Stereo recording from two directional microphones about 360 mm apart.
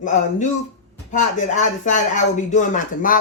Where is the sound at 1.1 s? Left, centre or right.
Centre.